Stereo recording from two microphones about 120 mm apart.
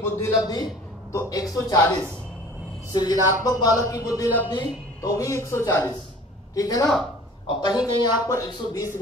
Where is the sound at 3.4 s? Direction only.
30° left (ahead or behind).